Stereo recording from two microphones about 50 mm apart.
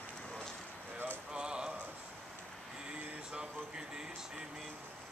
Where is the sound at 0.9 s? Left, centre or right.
Right.